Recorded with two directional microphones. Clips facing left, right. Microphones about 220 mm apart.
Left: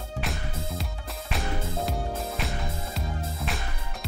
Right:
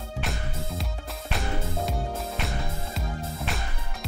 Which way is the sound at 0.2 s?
Centre (ahead or behind).